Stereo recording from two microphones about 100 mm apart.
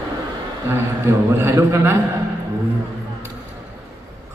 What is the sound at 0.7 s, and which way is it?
A man's voice, 25° right (ahead or behind).